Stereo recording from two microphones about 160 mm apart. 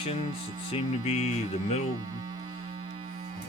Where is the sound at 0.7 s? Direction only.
45° left (ahead or behind).